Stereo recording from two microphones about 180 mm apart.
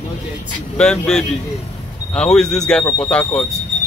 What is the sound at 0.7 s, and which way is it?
Speech, 5° left (ahead or behind).